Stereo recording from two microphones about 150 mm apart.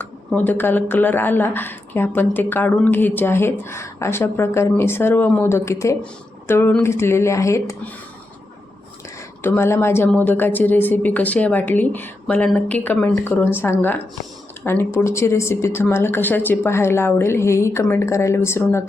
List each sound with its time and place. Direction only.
0.3 s speech: 10° left (ahead or behind)
9.4 s speech: 15° left (ahead or behind)